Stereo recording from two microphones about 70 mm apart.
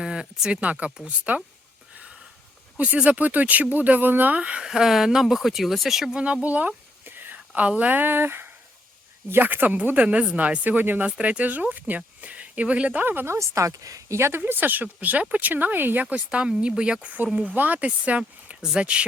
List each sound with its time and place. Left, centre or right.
0.0 s speech: centre
2.7 s speech: right; by 6.2 s centre
6.2 s a sound: centre
7.7 s speech: right
14.2 s speech: right; by 19.0 s centre